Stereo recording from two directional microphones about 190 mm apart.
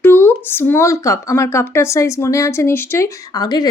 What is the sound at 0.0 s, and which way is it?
Speech, 10° left (ahead or behind).